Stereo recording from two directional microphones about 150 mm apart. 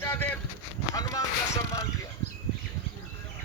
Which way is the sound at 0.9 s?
25° left (ahead or behind).